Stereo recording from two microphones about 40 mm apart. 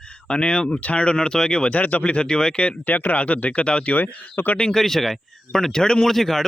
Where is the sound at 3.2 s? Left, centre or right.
Left.